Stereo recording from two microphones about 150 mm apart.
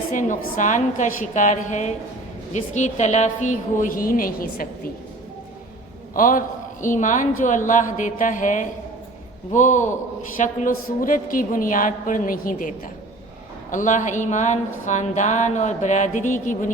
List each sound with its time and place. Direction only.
0.1 s a woman's voice: 60° left (ahead or behind)
6.1 s a woman's voice: 65° left (ahead or behind)